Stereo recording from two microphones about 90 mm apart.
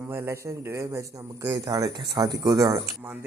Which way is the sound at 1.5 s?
40° right (ahead or behind).